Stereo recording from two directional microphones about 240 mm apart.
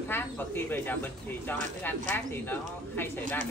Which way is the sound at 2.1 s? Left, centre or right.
Centre.